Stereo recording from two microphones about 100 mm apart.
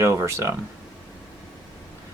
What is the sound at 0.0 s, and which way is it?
Speech, 30° right (ahead or behind).